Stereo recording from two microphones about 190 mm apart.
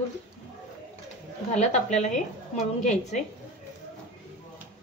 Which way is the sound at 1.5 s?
35° left (ahead or behind).